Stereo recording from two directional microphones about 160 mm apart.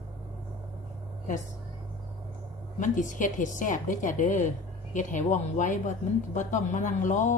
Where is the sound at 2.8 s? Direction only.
55° left (ahead or behind).